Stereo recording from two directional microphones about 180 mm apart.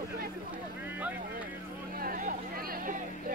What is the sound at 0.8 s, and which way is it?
Vehicle, 10° right (ahead or behind).